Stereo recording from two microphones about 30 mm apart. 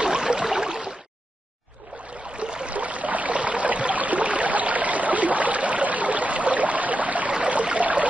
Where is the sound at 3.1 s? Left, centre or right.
Right.